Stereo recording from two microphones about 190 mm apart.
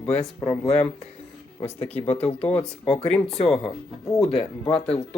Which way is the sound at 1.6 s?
35° left (ahead or behind).